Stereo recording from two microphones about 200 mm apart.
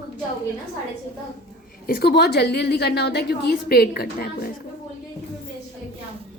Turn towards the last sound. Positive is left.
turn(degrees=50)  # may be behind; listen again after turning